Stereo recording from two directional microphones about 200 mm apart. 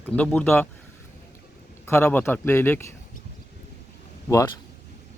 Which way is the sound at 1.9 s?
10° left (ahead or behind).